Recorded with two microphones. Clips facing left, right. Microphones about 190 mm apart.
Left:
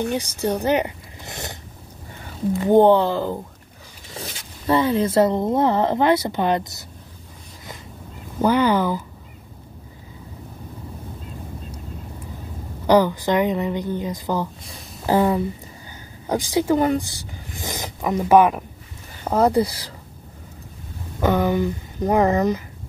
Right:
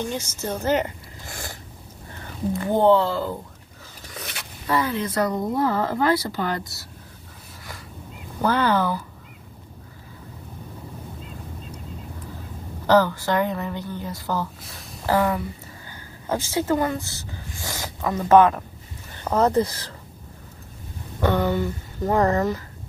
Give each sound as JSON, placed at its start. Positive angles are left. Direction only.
{"t": 0.1, "sound": "speech", "side_deg": 15}
{"t": 2.6, "sound": "speech", "side_deg": 20}
{"t": 4.2, "sound": "a sound", "side_deg": 25}
{"t": 4.6, "sound": "speech", "side_deg": 25}
{"t": 8.4, "sound": "speech", "side_deg": 15}
{"t": 12.8, "sound": "speech", "side_deg": 15}
{"t": 14.6, "sound": "a sound", "side_deg": 0}
{"t": 15.0, "sound": "speech", "side_deg": 20}
{"t": 21.2, "sound": "speech", "side_deg": 15}